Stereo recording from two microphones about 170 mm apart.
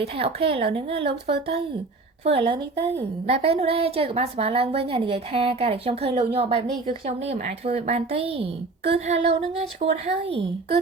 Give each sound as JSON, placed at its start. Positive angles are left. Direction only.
{"t": 0.0, "sound": "a woman's voice", "side_deg": -35}
{"t": 2.2, "sound": "a woman's voice", "side_deg": -35}